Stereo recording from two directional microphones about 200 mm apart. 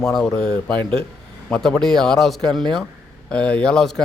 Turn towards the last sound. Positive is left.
turn(degrees=5)  # may be behind; listen again after turning